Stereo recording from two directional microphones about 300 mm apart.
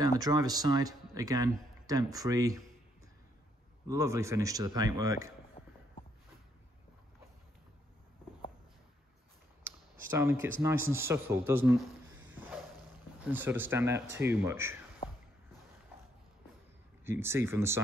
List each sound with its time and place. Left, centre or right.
0.0 s speech: centre
3.8 s speech: centre
5.6 s a sound: left
10.0 s speech: centre
12.2 s music: right
13.2 s speech: centre
15.0 s squish: centre
17.0 s speech: centre